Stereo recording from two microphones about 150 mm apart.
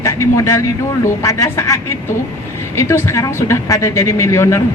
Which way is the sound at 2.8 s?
20° left (ahead or behind).